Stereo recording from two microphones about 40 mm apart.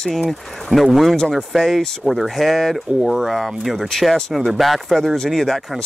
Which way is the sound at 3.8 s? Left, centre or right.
Centre.